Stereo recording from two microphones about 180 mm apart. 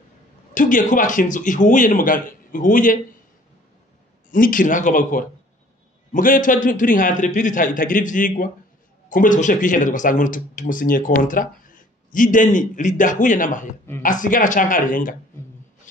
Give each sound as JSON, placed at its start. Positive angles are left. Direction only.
{"t": 0.6, "sound": "speech", "side_deg": 45}
{"t": 4.3, "sound": "speech", "side_deg": 50}